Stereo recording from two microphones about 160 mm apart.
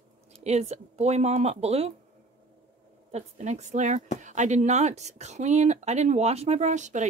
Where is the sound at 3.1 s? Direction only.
45° right (ahead or behind).